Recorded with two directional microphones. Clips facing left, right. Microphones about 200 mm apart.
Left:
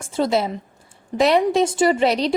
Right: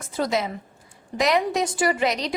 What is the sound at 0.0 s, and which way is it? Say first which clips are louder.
A woman's voice: left 5 dB; 30° left (ahead or behind).